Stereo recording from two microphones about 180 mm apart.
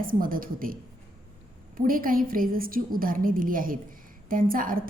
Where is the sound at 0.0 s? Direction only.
50° right (ahead or behind).